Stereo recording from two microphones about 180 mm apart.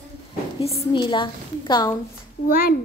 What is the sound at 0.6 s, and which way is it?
A woman's voice, 30° left (ahead or behind).